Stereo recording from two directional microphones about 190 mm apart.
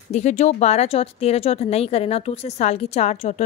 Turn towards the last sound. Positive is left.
turn(degrees=35)  # may be behind; listen again after turning